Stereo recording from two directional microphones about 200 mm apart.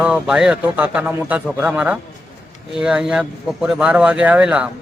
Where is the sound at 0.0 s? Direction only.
5° right (ahead or behind).